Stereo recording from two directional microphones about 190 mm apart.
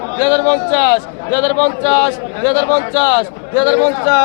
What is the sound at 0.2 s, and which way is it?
A man's voice, 5° left (ahead or behind).